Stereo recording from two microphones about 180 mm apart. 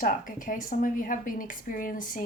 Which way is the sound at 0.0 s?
50° left (ahead or behind).